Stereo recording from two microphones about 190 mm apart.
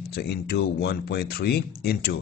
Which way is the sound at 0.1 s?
60° left (ahead or behind).